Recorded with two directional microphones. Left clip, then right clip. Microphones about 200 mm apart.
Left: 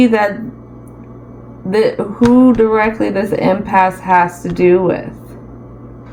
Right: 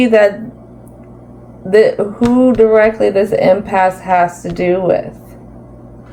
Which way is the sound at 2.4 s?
20° right (ahead or behind).